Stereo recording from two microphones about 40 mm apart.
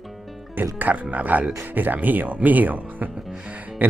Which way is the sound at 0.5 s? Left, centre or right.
Right.